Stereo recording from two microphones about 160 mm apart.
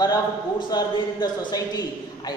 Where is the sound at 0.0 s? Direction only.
25° left (ahead or behind).